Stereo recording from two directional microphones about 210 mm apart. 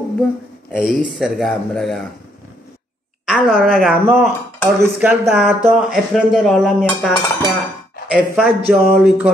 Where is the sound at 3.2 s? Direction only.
Centre (ahead or behind).